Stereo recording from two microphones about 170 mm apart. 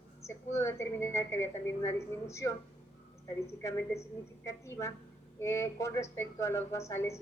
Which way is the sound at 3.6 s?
15° left (ahead or behind).